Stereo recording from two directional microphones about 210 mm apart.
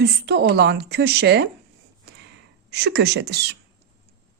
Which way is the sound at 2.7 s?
55° right (ahead or behind).